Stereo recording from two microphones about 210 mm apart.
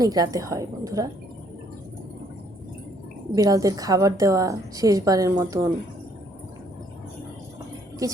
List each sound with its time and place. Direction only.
0.0 s a woman's voice: 15° right (ahead or behind)
3.3 s a woman's voice: 15° right (ahead or behind)